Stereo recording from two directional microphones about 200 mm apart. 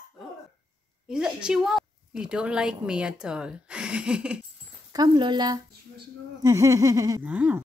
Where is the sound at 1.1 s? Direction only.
5° right (ahead or behind).